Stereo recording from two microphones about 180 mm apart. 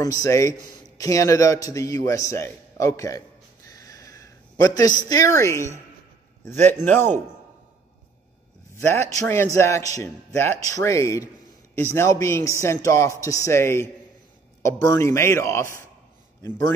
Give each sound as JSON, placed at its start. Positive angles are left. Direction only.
{"t": 0.0, "sound": "a man's voice", "side_deg": 20}
{"t": 8.7, "sound": "a man's voice", "side_deg": 15}